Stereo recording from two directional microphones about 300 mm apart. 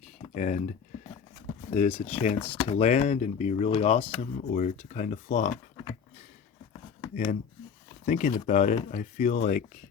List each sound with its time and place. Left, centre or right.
0.3 s speech: left
1.7 s speech: left
8.0 s speech: left